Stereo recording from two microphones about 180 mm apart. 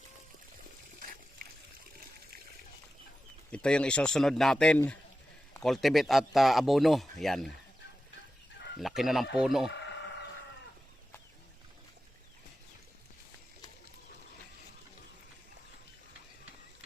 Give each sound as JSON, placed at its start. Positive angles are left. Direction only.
{"t": 3.5, "sound": "speech", "side_deg": 5}
{"t": 8.8, "sound": "speech", "side_deg": 0}
{"t": 9.6, "sound": "a sound", "side_deg": 75}